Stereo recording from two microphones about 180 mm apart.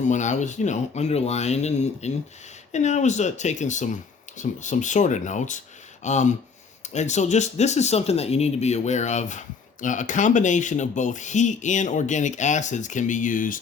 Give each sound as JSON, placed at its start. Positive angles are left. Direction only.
{"t": 0.0, "sound": "speech", "side_deg": 40}